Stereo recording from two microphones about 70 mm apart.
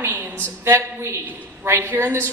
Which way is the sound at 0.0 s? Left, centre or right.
Right.